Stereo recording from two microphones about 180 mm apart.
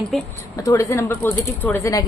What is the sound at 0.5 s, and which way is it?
Speech, 15° left (ahead or behind).